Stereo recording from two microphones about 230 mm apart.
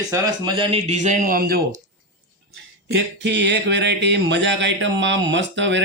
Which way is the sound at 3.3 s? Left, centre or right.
Right.